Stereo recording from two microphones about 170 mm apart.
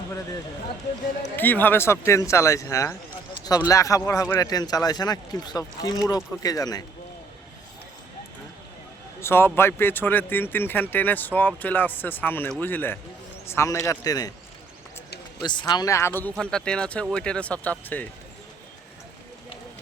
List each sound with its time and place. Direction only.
1.4 s speech: 10° left (ahead or behind)
9.2 s speech: 15° left (ahead or behind)
15.4 s speech: 25° left (ahead or behind); by 18.1 s 10° left (ahead or behind)